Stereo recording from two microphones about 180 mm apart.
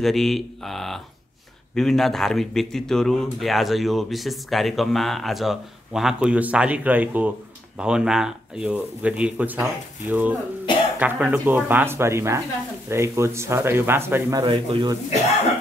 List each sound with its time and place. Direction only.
0.0 s a man's voice: centre (ahead or behind)
14.4 s a man's voice: 30° right (ahead or behind)